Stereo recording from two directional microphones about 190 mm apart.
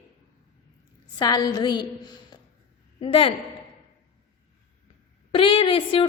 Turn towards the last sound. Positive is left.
turn(degrees=30)  # may be behind; listen again after turning